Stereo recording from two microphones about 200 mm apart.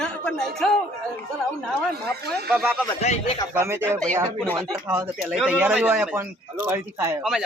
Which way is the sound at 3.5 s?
10° right (ahead or behind).